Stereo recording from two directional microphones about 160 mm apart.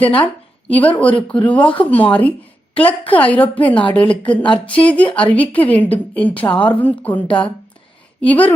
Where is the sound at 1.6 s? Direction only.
30° left (ahead or behind).